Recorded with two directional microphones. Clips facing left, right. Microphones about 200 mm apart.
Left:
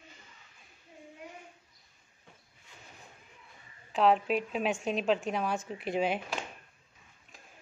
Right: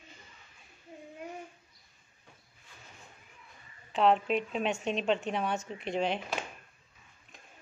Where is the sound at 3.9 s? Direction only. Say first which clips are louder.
Even; centre (ahead or behind).